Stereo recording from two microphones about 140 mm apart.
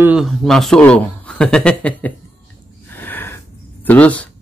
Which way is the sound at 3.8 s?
10° left (ahead or behind).